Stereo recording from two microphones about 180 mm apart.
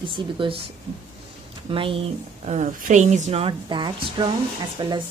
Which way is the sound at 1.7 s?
30° right (ahead or behind).